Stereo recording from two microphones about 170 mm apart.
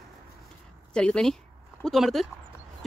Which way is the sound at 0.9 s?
5° left (ahead or behind).